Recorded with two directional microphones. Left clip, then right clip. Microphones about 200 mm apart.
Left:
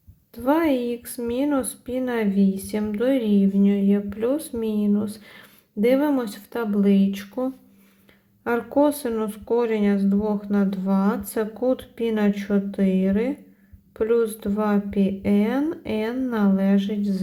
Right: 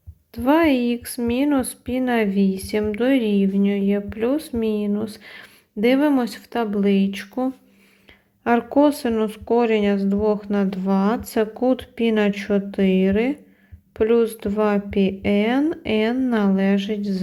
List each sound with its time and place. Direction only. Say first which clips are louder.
0.3 s speech: right 3 dB; 30° right (ahead or behind)